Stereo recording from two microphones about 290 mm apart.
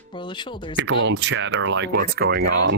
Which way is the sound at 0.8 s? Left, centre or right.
Right.